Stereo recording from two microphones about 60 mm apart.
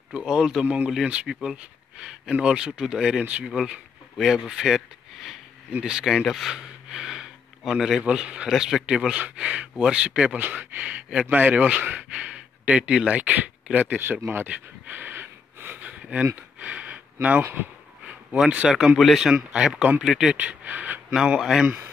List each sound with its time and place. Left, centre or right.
0.3 s speech: centre
1.2 s speech: centre
1.6 s a sound: centre
2.4 s speech: centre
5.7 s speech: centre
6.0 s speech: centre; by 13.9 s right
14.2 s speech: right
14.5 s a sound: right
15.8 s a sound: right
18.0 s a sound: centre
18.7 s speech: centre
20.3 s speech: right
21.1 s speech: centre